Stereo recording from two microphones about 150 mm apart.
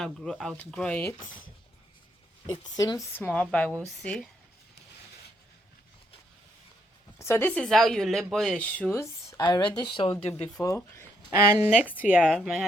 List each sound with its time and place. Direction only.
0.0 s speech: 5° left (ahead or behind)
2.5 s speech: 25° left (ahead or behind); by 4.3 s 5° left (ahead or behind)
7.2 s speech: 15° left (ahead or behind)
9.4 s speech: 30° left (ahead or behind)
10.5 s speech: 20° left (ahead or behind)
11.6 s speech: 10° right (ahead or behind)